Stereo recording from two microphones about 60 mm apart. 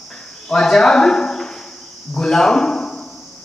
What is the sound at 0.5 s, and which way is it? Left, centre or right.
Speech, centre.